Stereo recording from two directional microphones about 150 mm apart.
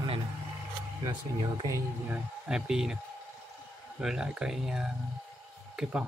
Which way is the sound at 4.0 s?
5° right (ahead or behind).